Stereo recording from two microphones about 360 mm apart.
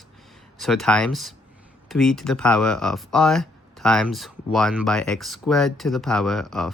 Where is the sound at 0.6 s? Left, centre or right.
Centre.